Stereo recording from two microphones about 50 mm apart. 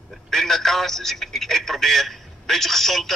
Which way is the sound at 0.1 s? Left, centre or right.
Centre.